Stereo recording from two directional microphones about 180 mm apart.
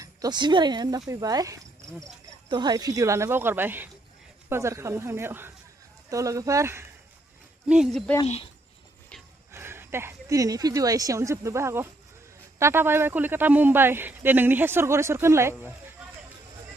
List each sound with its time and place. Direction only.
0.0 s speech: 20° right (ahead or behind)
7.7 s speech: centre (ahead or behind)
8.2 s speech: 30° left (ahead or behind)
9.5 s speech: 15° right (ahead or behind)